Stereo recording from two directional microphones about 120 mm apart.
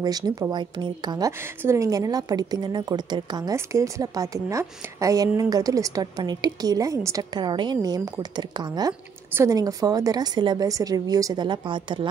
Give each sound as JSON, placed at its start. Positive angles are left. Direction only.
{"t": 0.0, "sound": "a woman's voice", "side_deg": -30}
{"t": 1.4, "sound": "a woman's voice", "side_deg": -20}
{"t": 3.5, "sound": "a woman's voice", "side_deg": -25}
{"t": 9.3, "sound": "a woman's voice", "side_deg": -25}
{"t": 11.4, "sound": "a woman's voice", "side_deg": -40}